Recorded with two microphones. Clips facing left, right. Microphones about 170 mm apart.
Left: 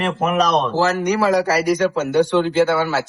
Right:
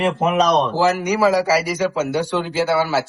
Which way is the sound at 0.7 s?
10° right (ahead or behind).